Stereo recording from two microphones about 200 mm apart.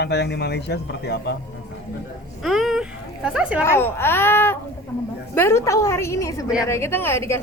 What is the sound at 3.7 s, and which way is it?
A woman's voice, 10° left (ahead or behind).